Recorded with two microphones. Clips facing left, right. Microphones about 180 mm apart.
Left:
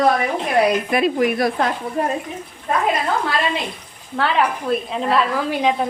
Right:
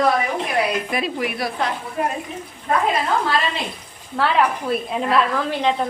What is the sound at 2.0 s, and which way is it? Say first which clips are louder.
Speech: left 2 dB; 35° left (ahead or behind).